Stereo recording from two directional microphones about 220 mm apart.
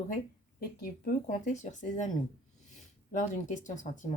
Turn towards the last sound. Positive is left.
turn(degrees=35)  # may be behind; listen again after turning